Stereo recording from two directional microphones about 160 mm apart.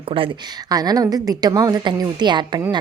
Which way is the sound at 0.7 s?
25° right (ahead or behind).